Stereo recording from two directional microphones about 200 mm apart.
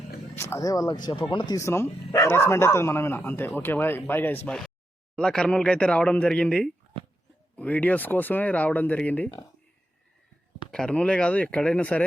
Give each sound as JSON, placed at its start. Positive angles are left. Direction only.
{"t": 0.3, "sound": "speech", "side_deg": 15}
{"t": 10.7, "sound": "speech", "side_deg": 5}